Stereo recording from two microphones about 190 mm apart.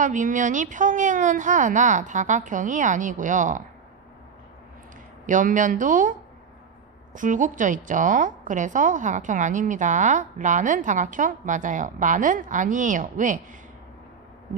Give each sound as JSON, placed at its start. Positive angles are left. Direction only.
{"t": 0.0, "sound": "a woman's voice", "side_deg": -40}
{"t": 5.2, "sound": "a woman's voice", "side_deg": -45}